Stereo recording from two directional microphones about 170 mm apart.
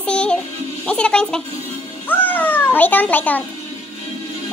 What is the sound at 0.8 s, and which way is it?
Speech, 5° left (ahead or behind).